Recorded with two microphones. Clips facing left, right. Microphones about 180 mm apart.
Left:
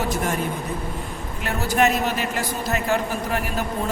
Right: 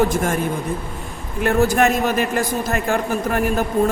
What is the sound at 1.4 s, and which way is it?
A man's voice, 50° right (ahead or behind).